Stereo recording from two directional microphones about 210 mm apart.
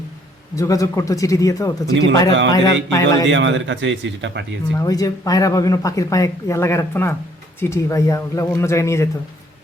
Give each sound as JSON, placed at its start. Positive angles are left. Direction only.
{"t": 0.5, "sound": "speech", "side_deg": 15}
{"t": 2.3, "sound": "speech", "side_deg": -60}
{"t": 2.9, "sound": "speech", "side_deg": 15}
{"t": 3.2, "sound": "speech", "side_deg": -60}
{"t": 4.8, "sound": "speech", "side_deg": 15}